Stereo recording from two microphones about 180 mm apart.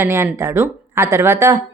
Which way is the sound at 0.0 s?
15° right (ahead or behind).